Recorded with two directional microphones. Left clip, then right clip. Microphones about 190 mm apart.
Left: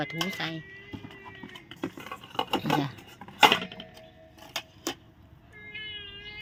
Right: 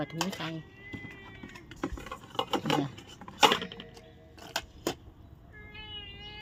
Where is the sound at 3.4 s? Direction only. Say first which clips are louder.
Left 3 dB; 25° left (ahead or behind).